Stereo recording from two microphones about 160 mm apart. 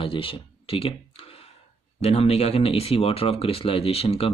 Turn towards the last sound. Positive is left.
turn(degrees=40)  # may be behind; listen again after turning